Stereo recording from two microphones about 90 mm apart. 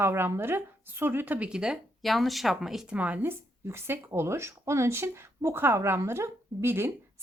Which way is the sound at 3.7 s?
25° right (ahead or behind).